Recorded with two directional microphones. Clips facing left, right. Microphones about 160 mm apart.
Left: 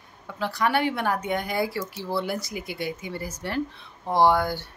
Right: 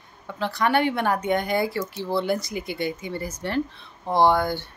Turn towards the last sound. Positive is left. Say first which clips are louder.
# right 1 dB
turn(degrees=5)  # may be behind; listen again after turning